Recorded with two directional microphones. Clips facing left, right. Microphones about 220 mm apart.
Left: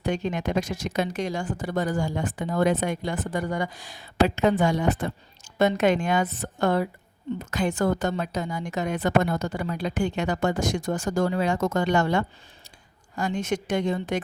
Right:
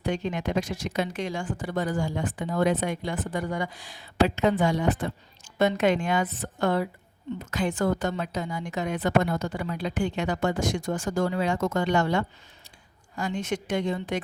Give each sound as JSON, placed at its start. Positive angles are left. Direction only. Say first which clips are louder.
{"t": 0.0, "sound": "speech", "louder": "left 2 dB", "side_deg": 45}